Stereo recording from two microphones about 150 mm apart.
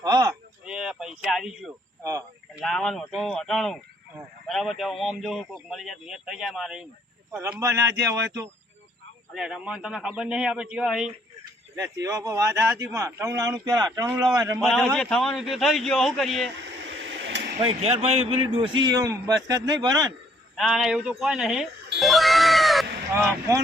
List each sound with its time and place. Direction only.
0.0 s a sound: 25° right (ahead or behind)
0.6 s a sound: 5° right (ahead or behind)
2.6 s a man's voice: centre (ahead or behind)
7.6 s a man's voice: 20° right (ahead or behind)
9.3 s a man's voice: 5° right (ahead or behind)
11.8 s a man's voice: 25° right (ahead or behind)
14.6 s a man's voice: centre (ahead or behind)
17.6 s a man's voice: 40° right (ahead or behind)
20.6 s speech: 5° right (ahead or behind)